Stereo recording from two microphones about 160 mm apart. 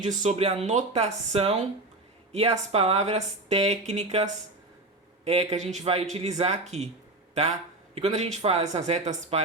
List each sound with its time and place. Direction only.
0.0 s speech: 50° right (ahead or behind)
7.9 s speech: 45° right (ahead or behind)